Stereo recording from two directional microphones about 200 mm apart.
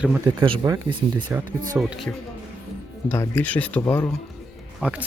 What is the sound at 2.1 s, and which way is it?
Speech, 10° left (ahead or behind).